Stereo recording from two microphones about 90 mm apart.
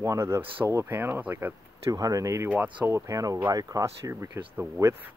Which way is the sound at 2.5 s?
20° right (ahead or behind).